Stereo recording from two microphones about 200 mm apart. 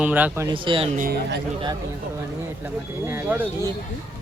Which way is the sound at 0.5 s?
25° right (ahead or behind).